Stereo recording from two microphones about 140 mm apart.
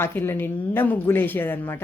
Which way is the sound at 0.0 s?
15° left (ahead or behind).